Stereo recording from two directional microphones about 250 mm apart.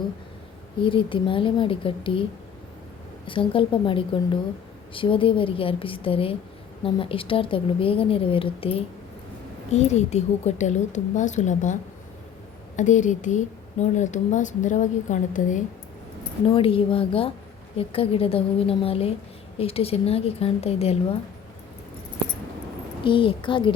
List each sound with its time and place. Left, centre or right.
0.8 s a woman's voice: centre
3.2 s a woman's voice: left
23.0 s a woman's voice: centre